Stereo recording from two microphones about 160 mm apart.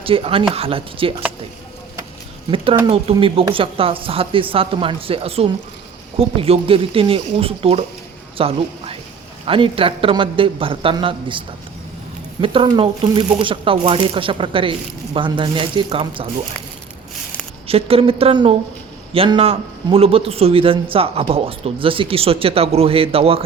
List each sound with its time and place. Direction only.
0.0 s speech: 35° right (ahead or behind)
2.8 s speech: 35° right (ahead or behind)
17.7 s speech: 35° right (ahead or behind)